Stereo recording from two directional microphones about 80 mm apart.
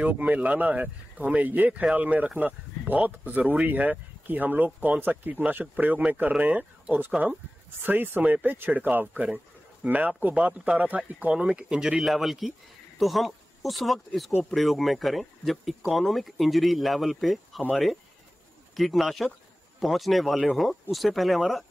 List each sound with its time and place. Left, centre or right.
0.0 s speech: centre
18.8 s speech: centre